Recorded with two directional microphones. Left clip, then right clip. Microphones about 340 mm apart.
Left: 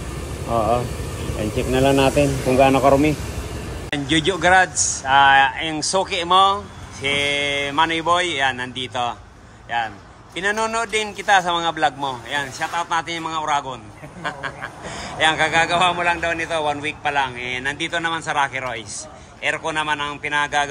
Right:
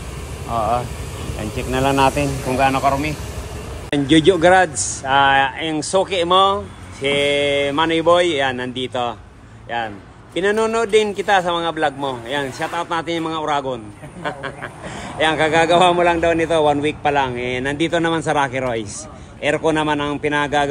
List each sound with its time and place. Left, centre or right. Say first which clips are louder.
1.4 s a man's voice: left 1 dB; centre
2.7 s speech: left 3 dB; right
3.9 s speech: right 6 dB; centre
14.2 s duck: right 1 dB; centre
15.1 s a man's voice: right 1 dB; centre